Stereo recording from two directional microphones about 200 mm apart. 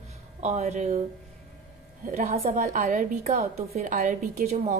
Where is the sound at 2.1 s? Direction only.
35° right (ahead or behind).